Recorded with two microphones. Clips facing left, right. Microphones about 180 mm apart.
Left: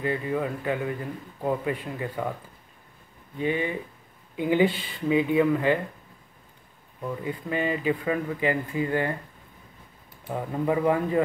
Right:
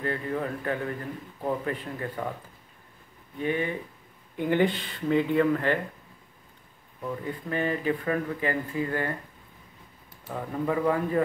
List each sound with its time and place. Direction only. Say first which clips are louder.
0.0 s speech: left 3 dB; 10° left (ahead or behind)
3.3 s speech: left 1 dB; 15° left (ahead or behind)
7.2 s speech: left 1 dB; 15° left (ahead or behind)
10.3 s speech: left 2 dB; 15° left (ahead or behind)